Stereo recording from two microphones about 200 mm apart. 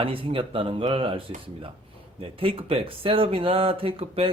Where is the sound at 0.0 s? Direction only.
25° right (ahead or behind).